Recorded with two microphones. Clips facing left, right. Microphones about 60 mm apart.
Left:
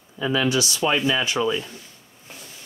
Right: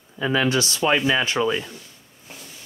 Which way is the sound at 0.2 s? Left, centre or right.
Right.